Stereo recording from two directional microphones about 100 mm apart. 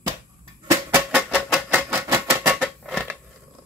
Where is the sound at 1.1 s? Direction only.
15° right (ahead or behind).